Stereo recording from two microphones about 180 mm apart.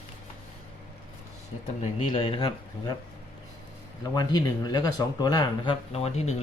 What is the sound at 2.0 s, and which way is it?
Speech, 30° left (ahead or behind).